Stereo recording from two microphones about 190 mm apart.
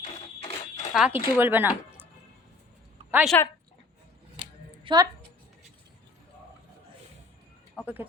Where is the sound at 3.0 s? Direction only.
35° right (ahead or behind).